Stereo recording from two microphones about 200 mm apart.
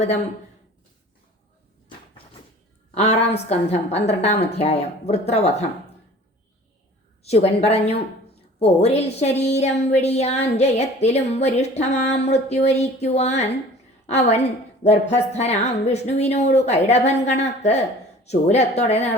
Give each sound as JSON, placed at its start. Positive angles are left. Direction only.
{"t": 2.9, "sound": "a woman's voice", "side_deg": 35}
{"t": 7.2, "sound": "a woman's voice", "side_deg": 30}